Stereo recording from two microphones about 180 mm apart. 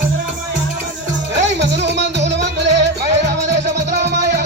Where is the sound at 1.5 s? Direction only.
70° right (ahead or behind).